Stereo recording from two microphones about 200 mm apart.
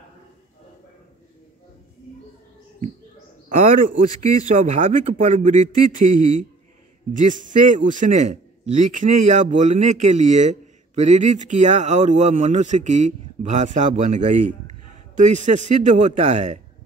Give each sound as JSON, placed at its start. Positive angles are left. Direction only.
{"t": 3.4, "sound": "a man's voice", "side_deg": -40}
{"t": 7.2, "sound": "a man's voice", "side_deg": -40}